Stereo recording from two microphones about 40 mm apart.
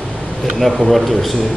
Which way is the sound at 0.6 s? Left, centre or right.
Centre.